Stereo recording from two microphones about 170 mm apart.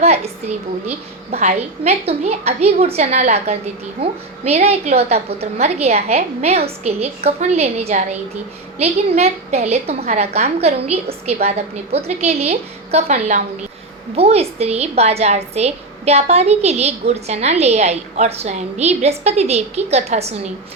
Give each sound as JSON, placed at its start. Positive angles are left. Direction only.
{"t": 0.0, "sound": "a woman's voice", "side_deg": -40}